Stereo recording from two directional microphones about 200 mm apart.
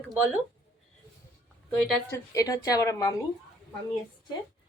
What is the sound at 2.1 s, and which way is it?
A woman's voice, 15° left (ahead or behind).